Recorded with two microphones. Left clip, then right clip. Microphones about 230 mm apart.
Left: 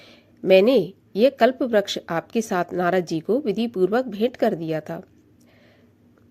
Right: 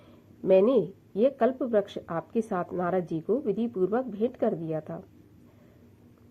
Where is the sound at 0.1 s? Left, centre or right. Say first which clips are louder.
Left 6 dB; left.